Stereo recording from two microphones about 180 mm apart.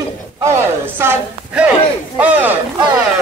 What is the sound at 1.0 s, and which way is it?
A man's voice, 10° right (ahead or behind).